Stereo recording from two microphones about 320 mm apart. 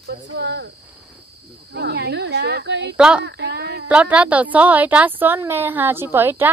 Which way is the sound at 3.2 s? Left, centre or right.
Right.